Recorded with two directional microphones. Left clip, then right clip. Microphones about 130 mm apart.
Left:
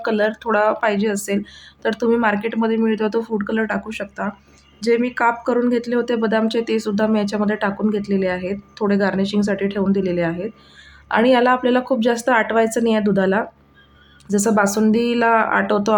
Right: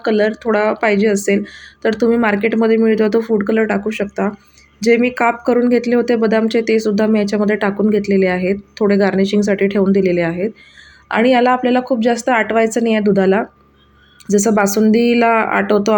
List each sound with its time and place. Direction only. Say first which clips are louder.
0.0 s speech: right 4 dB; 5° right (ahead or behind)